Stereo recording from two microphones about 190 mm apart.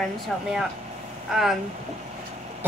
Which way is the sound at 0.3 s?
Centre (ahead or behind).